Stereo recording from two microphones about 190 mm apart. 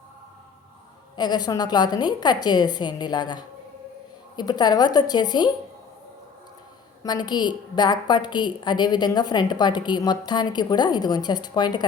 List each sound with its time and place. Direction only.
1.1 s a woman's voice: 20° left (ahead or behind)
7.0 s a woman's voice: 20° left (ahead or behind)